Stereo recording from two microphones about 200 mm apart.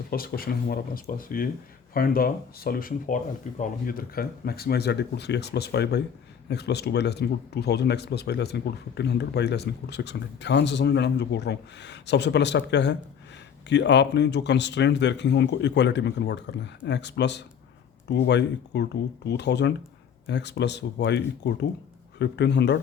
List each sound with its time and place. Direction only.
0.1 s speech: 45° left (ahead or behind)